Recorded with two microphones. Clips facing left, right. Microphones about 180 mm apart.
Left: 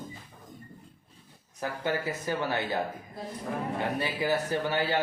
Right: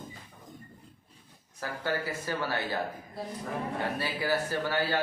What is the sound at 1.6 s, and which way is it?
A man's voice, 20° left (ahead or behind).